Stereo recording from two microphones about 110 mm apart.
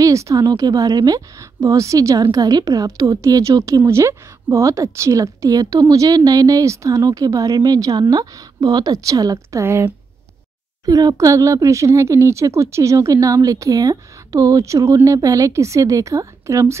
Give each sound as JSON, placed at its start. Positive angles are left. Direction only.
{"t": 0.0, "sound": "a woman's voice", "side_deg": -30}
{"t": 10.9, "sound": "speech", "side_deg": -35}